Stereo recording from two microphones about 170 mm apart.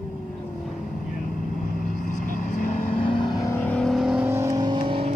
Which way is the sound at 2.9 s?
30° left (ahead or behind).